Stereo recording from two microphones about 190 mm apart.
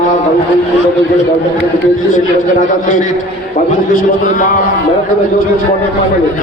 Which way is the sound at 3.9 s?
45° left (ahead or behind).